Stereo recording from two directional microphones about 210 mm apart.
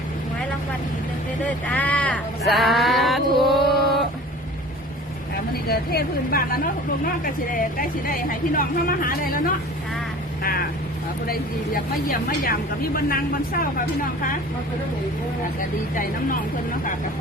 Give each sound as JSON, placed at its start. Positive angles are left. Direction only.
{"t": 1.7, "sound": "a sound", "side_deg": 5}
{"t": 5.6, "sound": "speech", "side_deg": 45}
{"t": 11.3, "sound": "speech", "side_deg": 45}